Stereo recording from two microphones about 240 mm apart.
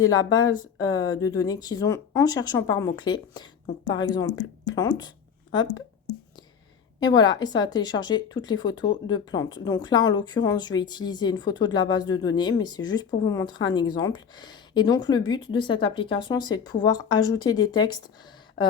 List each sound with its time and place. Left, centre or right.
0.0 s speech: centre
7.0 s speech: centre